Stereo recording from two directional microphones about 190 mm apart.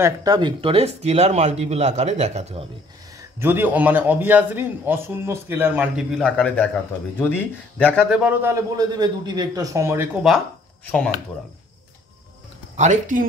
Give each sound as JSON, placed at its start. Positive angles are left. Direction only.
{"t": 0.0, "sound": "speech", "side_deg": -20}
{"t": 3.2, "sound": "a man's voice", "side_deg": -10}
{"t": 6.1, "sound": "a man's voice", "side_deg": 5}
{"t": 8.1, "sound": "a man's voice", "side_deg": -5}
{"t": 12.7, "sound": "speech", "side_deg": -40}